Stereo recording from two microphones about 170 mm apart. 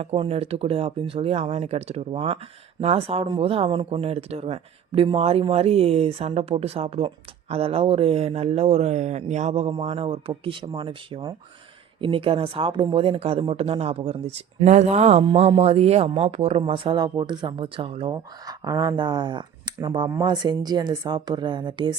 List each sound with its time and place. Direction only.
0.0 s a woman's voice: 35° right (ahead or behind)